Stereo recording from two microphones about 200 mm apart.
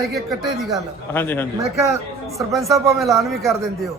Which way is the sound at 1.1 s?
10° left (ahead or behind).